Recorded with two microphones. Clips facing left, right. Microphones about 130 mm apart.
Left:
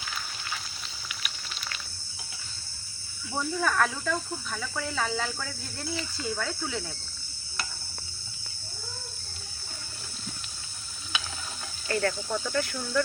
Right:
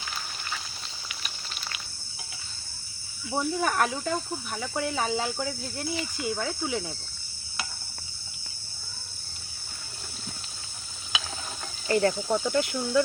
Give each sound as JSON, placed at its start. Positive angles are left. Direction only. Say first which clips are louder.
{"t": 3.3, "sound": "speech", "louder": "right 1 dB", "side_deg": -20}
{"t": 11.9, "sound": "speech", "louder": "right 5 dB", "side_deg": -20}